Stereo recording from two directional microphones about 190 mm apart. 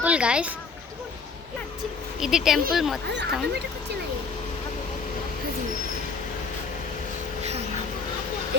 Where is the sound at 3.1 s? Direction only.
65° right (ahead or behind).